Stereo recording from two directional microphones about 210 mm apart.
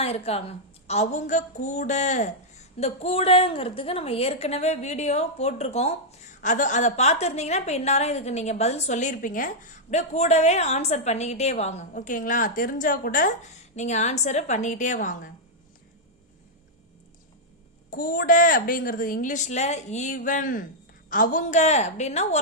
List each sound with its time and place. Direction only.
0.0 s a woman's voice: 30° left (ahead or behind)
17.9 s a woman's voice: 45° left (ahead or behind)